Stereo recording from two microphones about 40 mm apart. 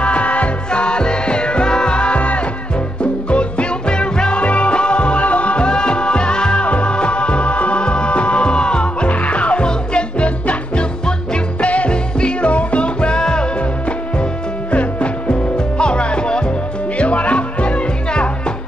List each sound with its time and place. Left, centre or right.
0.0 s music: left
0.7 s music: left
14.7 s music: left
15.5 s music: left
17.0 s music: left